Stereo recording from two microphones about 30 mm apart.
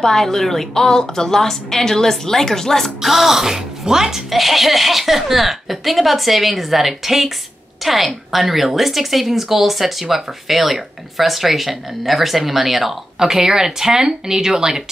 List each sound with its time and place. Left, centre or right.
0.0 s a woman's voice: centre
3.0 s speech: centre
4.3 s a woman's voice: centre